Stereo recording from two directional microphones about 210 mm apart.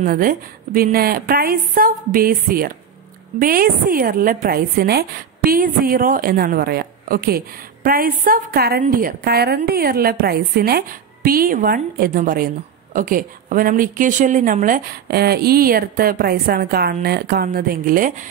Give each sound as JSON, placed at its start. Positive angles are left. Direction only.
{"t": 0.0, "sound": "a woman's voice", "side_deg": -40}